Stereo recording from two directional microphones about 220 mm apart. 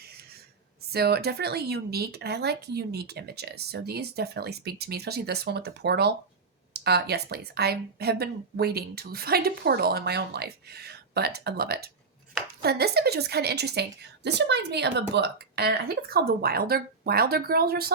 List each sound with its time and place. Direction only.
0.9 s speech: 45° right (ahead or behind)